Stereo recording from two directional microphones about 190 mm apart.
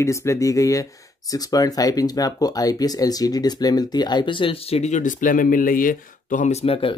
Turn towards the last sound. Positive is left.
turn(degrees=30)  # may be behind; listen again after turning